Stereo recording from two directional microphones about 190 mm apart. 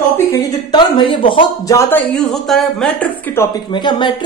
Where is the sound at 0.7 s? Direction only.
25° left (ahead or behind).